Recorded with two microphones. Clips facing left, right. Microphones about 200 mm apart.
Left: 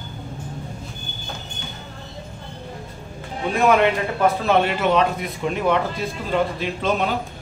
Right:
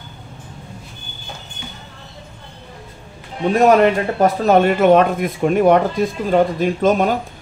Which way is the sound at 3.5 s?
40° right (ahead or behind).